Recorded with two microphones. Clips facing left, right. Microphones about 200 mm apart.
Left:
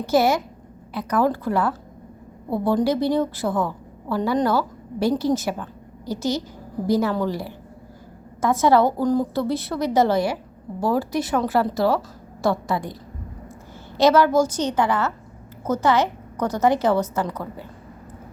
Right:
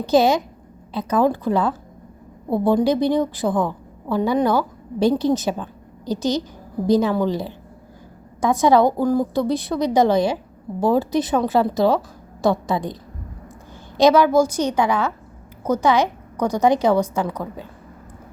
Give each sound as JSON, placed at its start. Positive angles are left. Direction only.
{"t": 0.0, "sound": "a woman's voice", "side_deg": -20}